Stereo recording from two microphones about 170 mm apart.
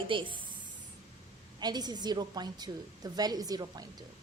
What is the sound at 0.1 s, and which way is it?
Speech, 30° right (ahead or behind).